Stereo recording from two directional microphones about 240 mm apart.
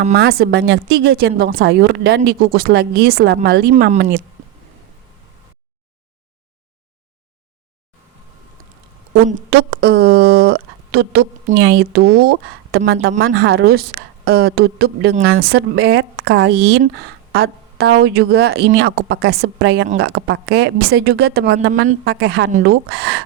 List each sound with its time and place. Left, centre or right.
0.1 s speech: right
9.5 s speech: right